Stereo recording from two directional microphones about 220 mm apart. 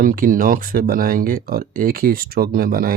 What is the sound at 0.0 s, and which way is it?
Speech, 40° right (ahead or behind).